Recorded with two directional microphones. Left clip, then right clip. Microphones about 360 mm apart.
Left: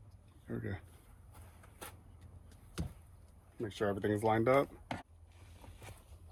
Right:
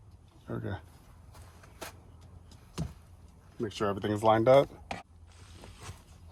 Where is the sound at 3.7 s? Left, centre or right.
Right.